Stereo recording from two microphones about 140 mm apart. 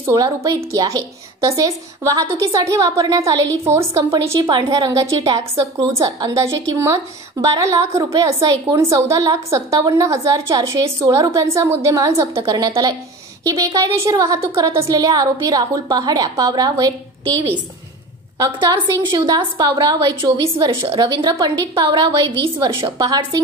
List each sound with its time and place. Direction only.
0.0 s a woman's voice: 20° right (ahead or behind)
18.4 s a woman's voice: 30° right (ahead or behind)